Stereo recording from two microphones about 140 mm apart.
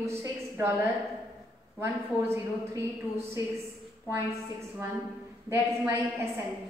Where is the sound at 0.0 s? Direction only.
20° right (ahead or behind).